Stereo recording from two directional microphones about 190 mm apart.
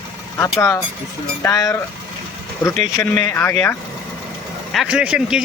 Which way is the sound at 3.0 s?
10° left (ahead or behind).